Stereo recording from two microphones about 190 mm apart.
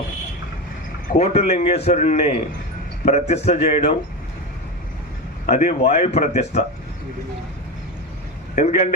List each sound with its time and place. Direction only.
1.2 s a man's voice: 35° left (ahead or behind)
5.5 s a man's voice: 40° left (ahead or behind)
8.5 s a man's voice: 35° left (ahead or behind)